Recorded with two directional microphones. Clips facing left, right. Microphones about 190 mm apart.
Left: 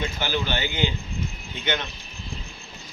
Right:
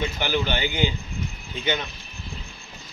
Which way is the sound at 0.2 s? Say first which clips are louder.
Right 2 dB; 15° right (ahead or behind).